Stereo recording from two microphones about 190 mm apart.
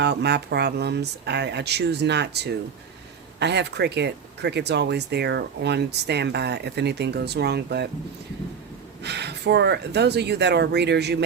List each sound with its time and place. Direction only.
0.0 s speech: 60° right (ahead or behind)
9.0 s speech: 60° right (ahead or behind)